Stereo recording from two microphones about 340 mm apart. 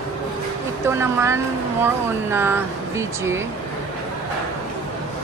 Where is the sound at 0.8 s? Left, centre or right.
Centre.